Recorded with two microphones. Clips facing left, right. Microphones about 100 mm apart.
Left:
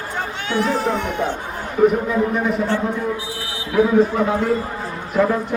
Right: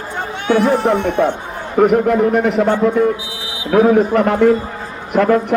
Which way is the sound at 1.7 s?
75° right (ahead or behind).